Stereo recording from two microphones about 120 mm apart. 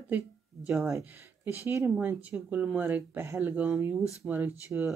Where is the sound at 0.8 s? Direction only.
25° right (ahead or behind).